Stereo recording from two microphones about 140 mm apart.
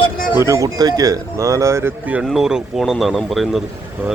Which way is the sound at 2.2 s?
5° right (ahead or behind).